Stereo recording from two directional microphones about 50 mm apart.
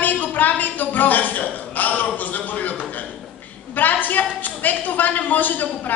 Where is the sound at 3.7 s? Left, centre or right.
Left.